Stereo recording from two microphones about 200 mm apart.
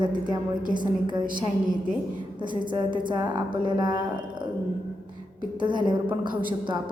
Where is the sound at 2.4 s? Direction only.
25° right (ahead or behind).